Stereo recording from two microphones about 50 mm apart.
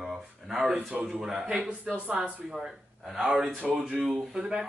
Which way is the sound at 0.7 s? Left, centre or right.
Right.